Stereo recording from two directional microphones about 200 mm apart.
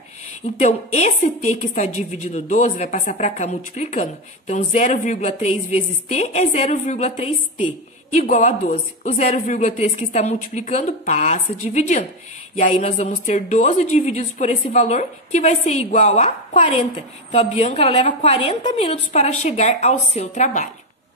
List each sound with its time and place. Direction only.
0.6 s speech: 35° left (ahead or behind)